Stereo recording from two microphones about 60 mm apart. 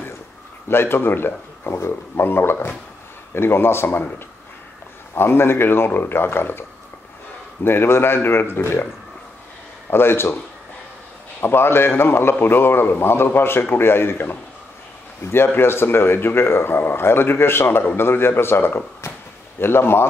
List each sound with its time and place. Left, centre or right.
0.7 s speech: left
5.1 s speech: left
7.6 s speech: left
9.8 s speech: left
11.4 s speech: left
19.0 s speech: left
19.6 s speech: left